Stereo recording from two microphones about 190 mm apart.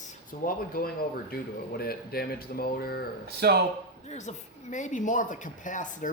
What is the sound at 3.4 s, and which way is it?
Speech, 60° right (ahead or behind).